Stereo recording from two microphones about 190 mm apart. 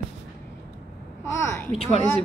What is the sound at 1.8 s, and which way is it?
Speech, 35° left (ahead or behind).